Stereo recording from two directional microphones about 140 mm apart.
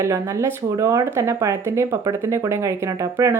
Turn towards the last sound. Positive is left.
turn(degrees=-20)  # may be behind; listen again after turning